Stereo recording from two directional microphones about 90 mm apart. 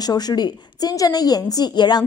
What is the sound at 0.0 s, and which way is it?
A woman's voice, 50° left (ahead or behind).